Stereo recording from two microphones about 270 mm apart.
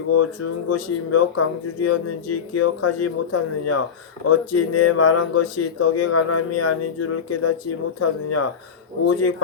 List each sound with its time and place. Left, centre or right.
0.2 s speech: left